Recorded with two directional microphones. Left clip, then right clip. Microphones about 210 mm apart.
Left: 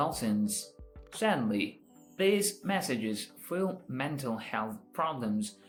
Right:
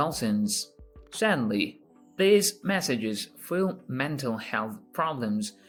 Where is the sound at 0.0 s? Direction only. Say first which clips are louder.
Right 3 dB; 50° right (ahead or behind).